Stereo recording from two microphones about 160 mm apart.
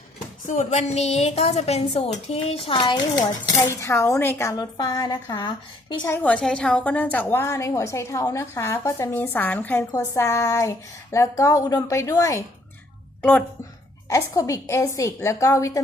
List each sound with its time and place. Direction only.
0.4 s a woman's voice: 50° left (ahead or behind); by 6.1 s 30° left (ahead or behind)
6.1 s a woman's voice: 10° left (ahead or behind)
14.1 s a woman's voice: 20° left (ahead or behind)